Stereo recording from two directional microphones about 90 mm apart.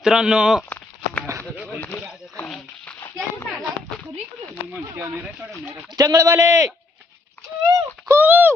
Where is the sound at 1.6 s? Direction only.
20° left (ahead or behind).